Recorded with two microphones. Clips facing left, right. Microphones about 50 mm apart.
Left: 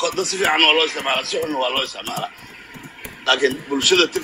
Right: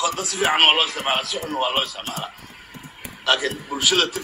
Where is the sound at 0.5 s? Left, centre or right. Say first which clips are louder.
Left 1 dB; left.